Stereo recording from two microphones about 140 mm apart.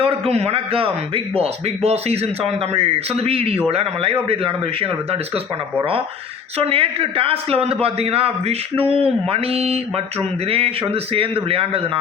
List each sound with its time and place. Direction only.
0.0 s a man's voice: 45° right (ahead or behind)
6.6 s a man's voice: 45° right (ahead or behind)